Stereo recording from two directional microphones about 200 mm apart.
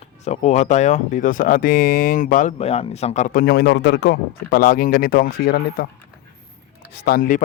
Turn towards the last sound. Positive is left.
turn(degrees=45)  # may be behind; listen again after turning